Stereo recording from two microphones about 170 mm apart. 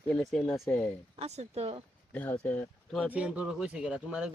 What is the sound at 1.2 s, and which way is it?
Speech, 40° right (ahead or behind).